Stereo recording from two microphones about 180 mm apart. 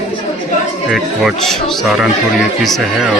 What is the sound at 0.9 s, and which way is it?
Speech, centre (ahead or behind).